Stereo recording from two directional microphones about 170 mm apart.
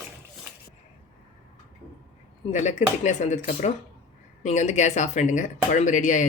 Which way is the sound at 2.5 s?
45° left (ahead or behind).